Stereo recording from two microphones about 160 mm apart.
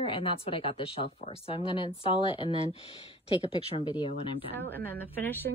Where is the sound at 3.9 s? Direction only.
30° left (ahead or behind).